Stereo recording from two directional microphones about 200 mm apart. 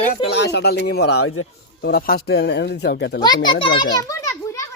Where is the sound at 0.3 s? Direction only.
55° left (ahead or behind).